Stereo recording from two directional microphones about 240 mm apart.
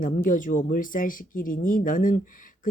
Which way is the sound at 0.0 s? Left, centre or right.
Left.